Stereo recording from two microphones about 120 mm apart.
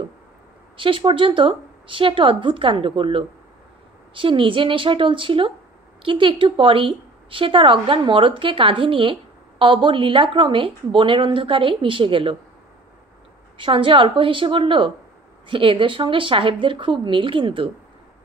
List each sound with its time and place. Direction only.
0.7 s a woman's voice: 45° right (ahead or behind)
13.6 s a woman's voice: 45° right (ahead or behind)